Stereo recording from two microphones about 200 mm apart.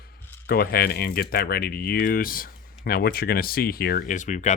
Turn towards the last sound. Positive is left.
turn(degrees=40)  # may be behind; listen again after turning